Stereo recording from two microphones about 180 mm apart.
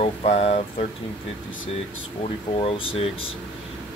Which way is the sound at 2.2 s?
30° left (ahead or behind).